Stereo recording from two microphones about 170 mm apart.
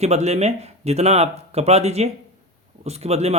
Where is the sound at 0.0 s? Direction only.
40° right (ahead or behind).